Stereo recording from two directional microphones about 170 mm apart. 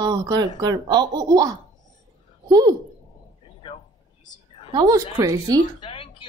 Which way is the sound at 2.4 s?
20° right (ahead or behind).